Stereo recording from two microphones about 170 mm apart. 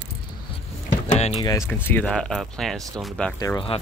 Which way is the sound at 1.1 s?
40° left (ahead or behind).